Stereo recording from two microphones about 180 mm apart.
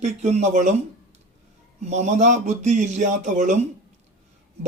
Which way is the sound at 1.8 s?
40° right (ahead or behind).